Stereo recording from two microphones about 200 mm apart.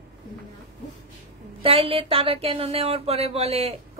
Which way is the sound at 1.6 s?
30° right (ahead or behind).